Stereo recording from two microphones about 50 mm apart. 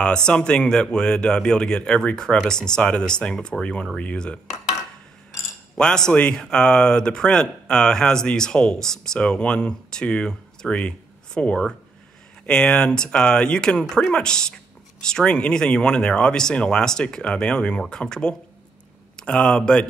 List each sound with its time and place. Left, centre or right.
0.0 s speech: centre
5.8 s speech: centre
9.2 s speech: left